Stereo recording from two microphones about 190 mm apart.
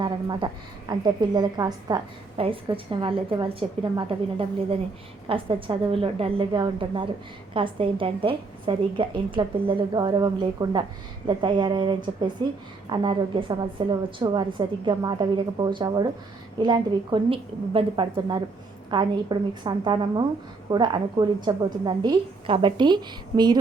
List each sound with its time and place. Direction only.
0.0 s a woman's voice: 25° right (ahead or behind)